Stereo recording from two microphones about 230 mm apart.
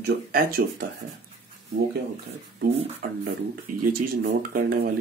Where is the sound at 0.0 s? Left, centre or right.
Right.